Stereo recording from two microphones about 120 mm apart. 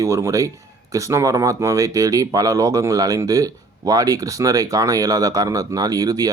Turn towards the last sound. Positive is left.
turn(degrees=-30)  # may be behind; listen again after turning